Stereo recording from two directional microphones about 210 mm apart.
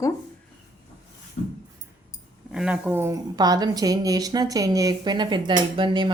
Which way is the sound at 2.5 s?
5° right (ahead or behind).